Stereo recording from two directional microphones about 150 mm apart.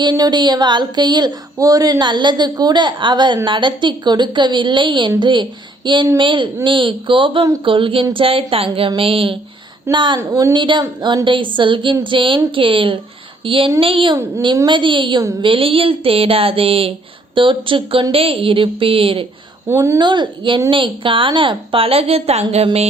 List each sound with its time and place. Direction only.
0.0 s a woman's voice: 30° right (ahead or behind)
10.2 s speech: 20° right (ahead or behind)
10.5 s a woman's voice: 30° right (ahead or behind)
19.6 s a woman's voice: 15° right (ahead or behind)
20.0 s a woman's voice: 30° right (ahead or behind)